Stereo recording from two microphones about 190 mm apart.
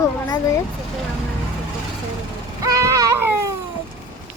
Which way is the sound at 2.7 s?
15° right (ahead or behind).